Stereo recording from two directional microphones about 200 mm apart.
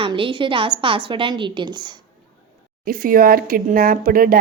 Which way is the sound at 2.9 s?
45° right (ahead or behind).